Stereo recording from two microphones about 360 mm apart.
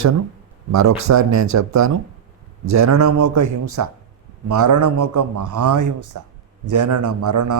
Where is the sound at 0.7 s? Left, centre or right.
Right.